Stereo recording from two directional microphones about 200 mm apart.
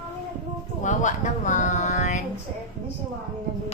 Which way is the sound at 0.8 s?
40° left (ahead or behind).